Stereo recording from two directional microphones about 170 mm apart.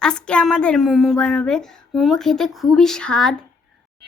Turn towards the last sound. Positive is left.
turn(degrees=5)  # may be behind; listen again after turning